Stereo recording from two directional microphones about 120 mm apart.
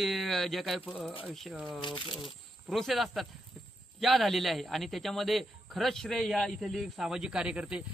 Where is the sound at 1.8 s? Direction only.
45° left (ahead or behind).